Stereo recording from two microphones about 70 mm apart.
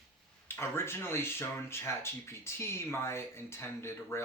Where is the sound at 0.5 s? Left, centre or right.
Left.